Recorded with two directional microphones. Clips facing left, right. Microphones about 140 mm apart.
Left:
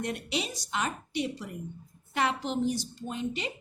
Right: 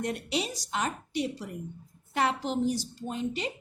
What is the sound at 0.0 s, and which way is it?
A woman's voice, 40° right (ahead or behind).